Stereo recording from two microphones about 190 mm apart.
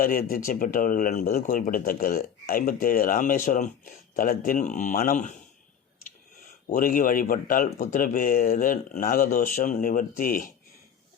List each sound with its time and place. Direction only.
0.0 s speech: 50° left (ahead or behind)
6.7 s speech: 50° left (ahead or behind)